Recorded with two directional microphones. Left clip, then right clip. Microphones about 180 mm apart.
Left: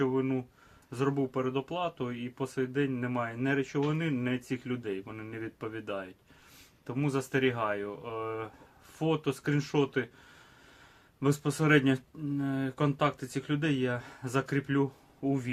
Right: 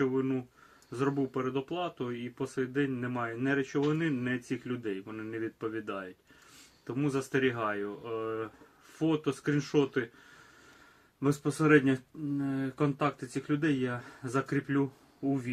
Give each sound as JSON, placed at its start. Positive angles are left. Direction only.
{"t": 0.0, "sound": "speech", "side_deg": 35}
{"t": 11.2, "sound": "a man's voice", "side_deg": 25}